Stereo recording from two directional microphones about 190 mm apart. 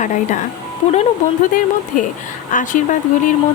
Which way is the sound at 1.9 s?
45° left (ahead or behind).